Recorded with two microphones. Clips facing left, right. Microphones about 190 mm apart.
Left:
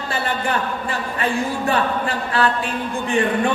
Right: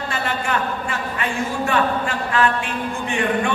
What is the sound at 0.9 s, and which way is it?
Speech, 35° left (ahead or behind).